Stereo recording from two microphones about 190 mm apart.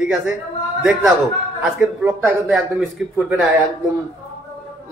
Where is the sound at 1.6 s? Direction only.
5° right (ahead or behind).